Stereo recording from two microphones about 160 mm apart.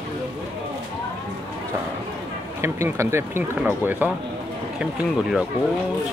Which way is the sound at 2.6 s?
15° right (ahead or behind).